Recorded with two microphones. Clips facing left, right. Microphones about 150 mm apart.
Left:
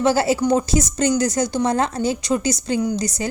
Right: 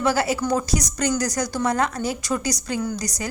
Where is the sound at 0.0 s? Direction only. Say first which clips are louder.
Left 4 dB; 25° left (ahead or behind).